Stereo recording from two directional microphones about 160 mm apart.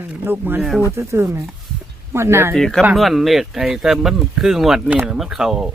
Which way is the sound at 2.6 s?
5° left (ahead or behind).